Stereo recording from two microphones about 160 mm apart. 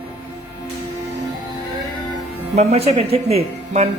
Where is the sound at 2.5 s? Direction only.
40° right (ahead or behind).